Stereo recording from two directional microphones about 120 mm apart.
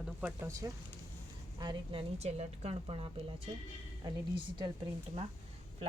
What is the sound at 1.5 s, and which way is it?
A woman's voice, 40° right (ahead or behind).